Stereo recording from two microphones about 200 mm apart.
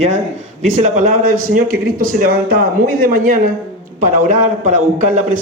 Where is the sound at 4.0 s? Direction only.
40° right (ahead or behind).